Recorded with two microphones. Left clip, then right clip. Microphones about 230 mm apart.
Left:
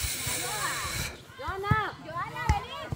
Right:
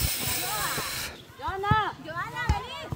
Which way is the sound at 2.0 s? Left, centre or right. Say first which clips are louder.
Right 2 dB; right.